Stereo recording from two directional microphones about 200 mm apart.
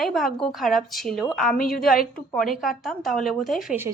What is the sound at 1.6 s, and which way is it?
Speech, 50° left (ahead or behind).